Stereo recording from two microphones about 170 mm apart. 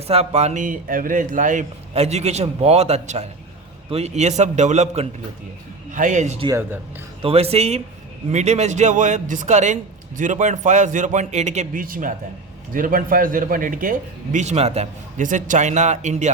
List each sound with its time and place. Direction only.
0.1 s a man's voice: 40° right (ahead or behind)
1.9 s a man's voice: 40° right (ahead or behind)
14.3 s a man's voice: 40° right (ahead or behind)